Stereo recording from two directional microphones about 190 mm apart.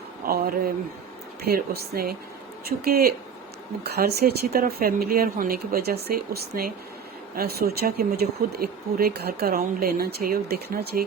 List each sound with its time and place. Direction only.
0.3 s speech: 50° right (ahead or behind)